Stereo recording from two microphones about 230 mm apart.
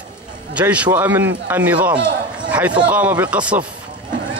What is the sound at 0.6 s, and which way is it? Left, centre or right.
A man's voice, centre.